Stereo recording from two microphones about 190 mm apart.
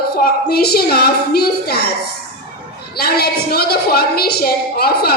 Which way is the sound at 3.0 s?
55° left (ahead or behind).